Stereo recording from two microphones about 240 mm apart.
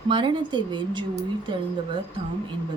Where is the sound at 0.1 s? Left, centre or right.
Centre.